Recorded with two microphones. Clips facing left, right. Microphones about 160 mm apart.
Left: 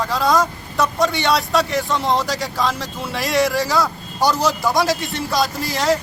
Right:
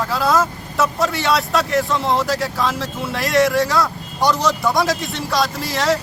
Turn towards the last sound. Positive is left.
turn(degrees=0)  # may be behind; listen again after turning